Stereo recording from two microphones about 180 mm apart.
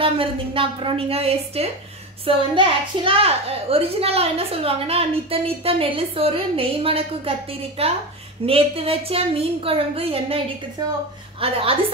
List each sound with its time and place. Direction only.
0.0 s a woman's voice: 30° right (ahead or behind)